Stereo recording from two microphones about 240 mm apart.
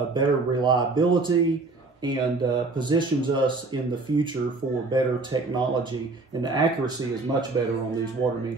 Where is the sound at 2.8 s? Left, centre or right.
Centre.